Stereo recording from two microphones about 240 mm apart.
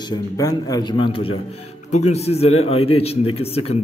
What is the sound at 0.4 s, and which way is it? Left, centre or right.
A man's voice, centre.